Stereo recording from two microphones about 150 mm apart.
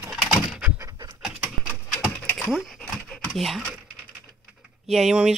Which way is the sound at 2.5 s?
5° right (ahead or behind).